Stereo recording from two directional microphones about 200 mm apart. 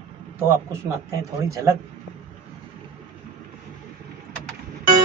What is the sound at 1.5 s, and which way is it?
Speech, 15° right (ahead or behind).